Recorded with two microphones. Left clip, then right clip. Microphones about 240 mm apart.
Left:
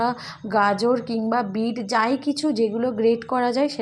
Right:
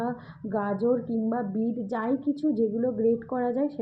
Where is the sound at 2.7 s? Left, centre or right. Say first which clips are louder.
Left 4 dB; centre.